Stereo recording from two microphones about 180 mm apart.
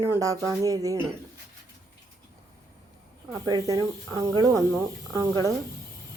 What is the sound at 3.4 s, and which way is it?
Speech, 20° right (ahead or behind).